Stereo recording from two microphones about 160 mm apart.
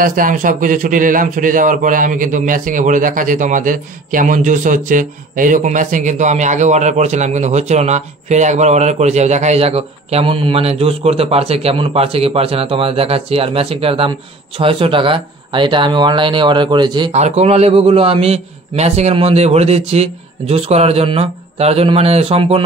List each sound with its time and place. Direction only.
0.0 s a man's voice: 60° right (ahead or behind); by 17.1 s 30° right (ahead or behind)
17.1 s a man's voice: 45° right (ahead or behind)